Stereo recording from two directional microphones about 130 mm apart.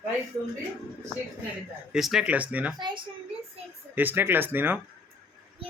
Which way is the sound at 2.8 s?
35° right (ahead or behind).